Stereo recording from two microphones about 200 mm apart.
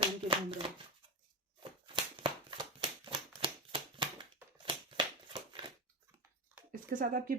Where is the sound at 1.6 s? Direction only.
25° right (ahead or behind).